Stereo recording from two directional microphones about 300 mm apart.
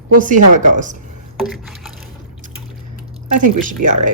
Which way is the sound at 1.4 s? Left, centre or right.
Centre.